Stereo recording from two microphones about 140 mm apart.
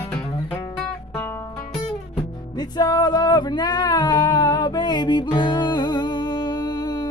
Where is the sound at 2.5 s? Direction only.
30° left (ahead or behind).